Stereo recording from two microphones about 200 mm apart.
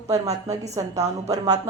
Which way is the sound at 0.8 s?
15° right (ahead or behind).